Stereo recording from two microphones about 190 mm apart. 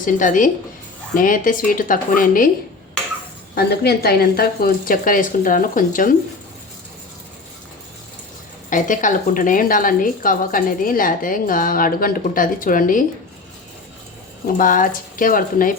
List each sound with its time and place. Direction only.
0.0 s a woman's voice: 45° left (ahead or behind)
3.5 s a woman's voice: 55° left (ahead or behind)
8.7 s a woman's voice: 40° left (ahead or behind)
14.4 s a woman's voice: 45° left (ahead or behind)